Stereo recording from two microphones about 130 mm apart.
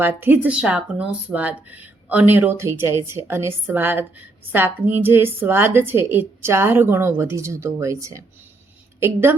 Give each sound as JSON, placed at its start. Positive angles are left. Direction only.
{"t": 0.0, "sound": "a woman's voice", "side_deg": -15}